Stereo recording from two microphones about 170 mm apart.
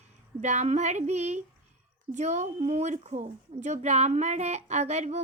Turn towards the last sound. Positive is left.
turn(degrees=-40)  # may be behind; listen again after turning